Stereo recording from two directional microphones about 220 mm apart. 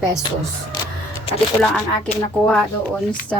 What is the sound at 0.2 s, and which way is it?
Speech, 20° left (ahead or behind).